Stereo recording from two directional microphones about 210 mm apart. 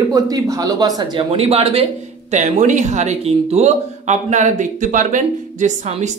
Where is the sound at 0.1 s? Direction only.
15° right (ahead or behind).